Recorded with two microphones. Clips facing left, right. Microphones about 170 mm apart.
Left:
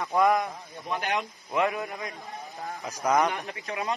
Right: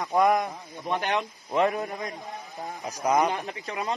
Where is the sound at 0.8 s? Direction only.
40° right (ahead or behind).